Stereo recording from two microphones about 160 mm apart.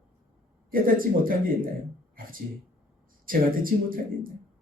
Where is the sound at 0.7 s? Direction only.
60° right (ahead or behind).